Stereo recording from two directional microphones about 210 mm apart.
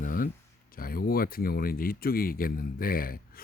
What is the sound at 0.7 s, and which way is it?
Speech, 45° left (ahead or behind).